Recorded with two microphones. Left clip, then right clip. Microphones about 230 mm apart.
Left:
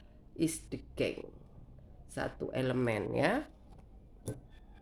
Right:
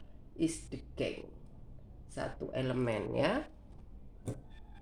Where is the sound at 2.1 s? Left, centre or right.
Left.